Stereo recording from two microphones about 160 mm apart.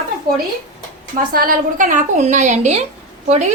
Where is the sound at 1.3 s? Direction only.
60° right (ahead or behind).